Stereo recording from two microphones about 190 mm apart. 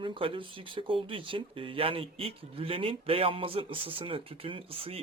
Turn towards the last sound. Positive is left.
turn(degrees=-30)  # may be behind; listen again after turning